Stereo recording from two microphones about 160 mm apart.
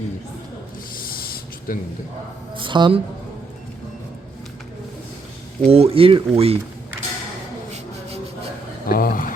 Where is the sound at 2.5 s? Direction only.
30° right (ahead or behind).